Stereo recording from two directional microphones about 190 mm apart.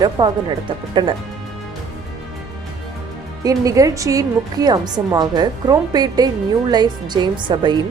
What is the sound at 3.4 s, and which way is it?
A woman's voice, 20° right (ahead or behind).